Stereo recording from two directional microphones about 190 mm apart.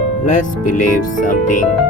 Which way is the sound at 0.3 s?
40° left (ahead or behind).